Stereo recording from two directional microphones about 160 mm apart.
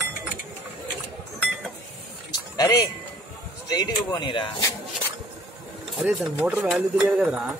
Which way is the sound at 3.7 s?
25° left (ahead or behind).